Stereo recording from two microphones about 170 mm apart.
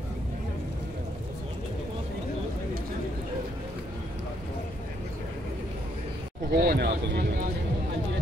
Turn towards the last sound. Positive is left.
turn(degrees=-65)  # may be behind; listen again after turning